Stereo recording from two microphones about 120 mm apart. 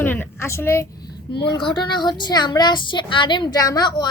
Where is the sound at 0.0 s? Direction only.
20° left (ahead or behind).